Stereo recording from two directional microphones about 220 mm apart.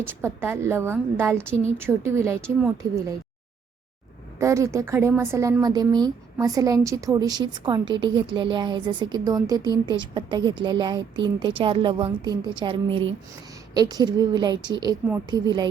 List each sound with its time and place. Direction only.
0.0 s a woman's voice: 10° right (ahead or behind)
4.4 s a woman's voice: 15° right (ahead or behind)